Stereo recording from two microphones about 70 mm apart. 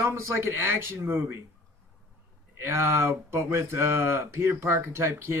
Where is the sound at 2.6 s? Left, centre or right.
Right.